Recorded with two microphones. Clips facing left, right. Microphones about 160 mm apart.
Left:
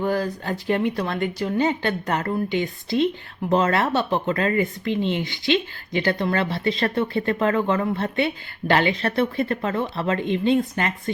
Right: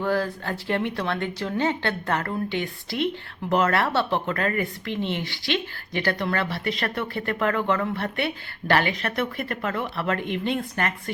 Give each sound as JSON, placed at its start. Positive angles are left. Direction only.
{"t": 0.0, "sound": "a woman's voice", "side_deg": 15}